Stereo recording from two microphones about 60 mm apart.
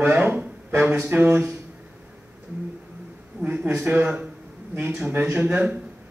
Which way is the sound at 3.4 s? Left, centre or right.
Right.